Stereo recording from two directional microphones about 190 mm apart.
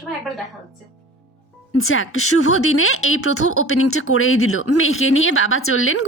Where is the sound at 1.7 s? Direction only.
90° left.